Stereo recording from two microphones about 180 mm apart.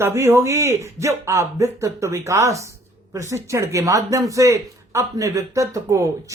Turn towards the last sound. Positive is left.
turn(degrees=-15)  # may be behind; listen again after turning